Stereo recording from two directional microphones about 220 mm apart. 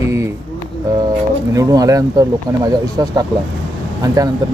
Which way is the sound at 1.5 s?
15° right (ahead or behind).